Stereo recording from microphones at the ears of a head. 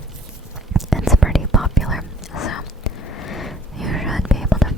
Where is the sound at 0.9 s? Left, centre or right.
Centre.